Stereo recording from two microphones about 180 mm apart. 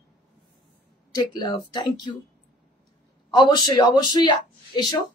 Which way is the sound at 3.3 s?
25° left (ahead or behind).